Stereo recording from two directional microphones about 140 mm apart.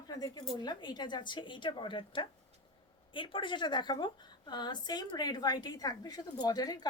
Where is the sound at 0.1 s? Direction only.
30° left (ahead or behind).